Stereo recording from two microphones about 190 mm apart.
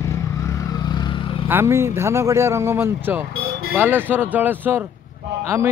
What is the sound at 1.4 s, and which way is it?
Speech, 10° right (ahead or behind).